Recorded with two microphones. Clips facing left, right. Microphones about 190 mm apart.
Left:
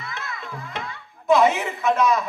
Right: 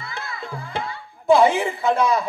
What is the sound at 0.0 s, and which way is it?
Music, 30° right (ahead or behind).